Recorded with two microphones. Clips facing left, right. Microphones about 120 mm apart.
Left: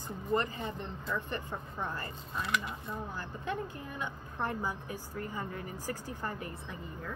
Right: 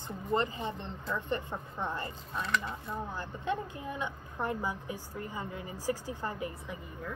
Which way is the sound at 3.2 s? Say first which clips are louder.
Right 3 dB; 20° right (ahead or behind).